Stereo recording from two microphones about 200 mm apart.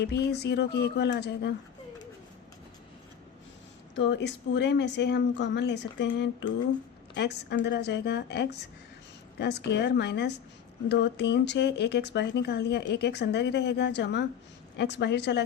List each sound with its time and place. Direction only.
0.0 s speech: 55° left (ahead or behind)
3.9 s speech: 60° left (ahead or behind)